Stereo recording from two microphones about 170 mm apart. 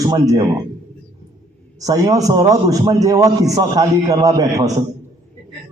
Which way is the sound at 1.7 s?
20° right (ahead or behind).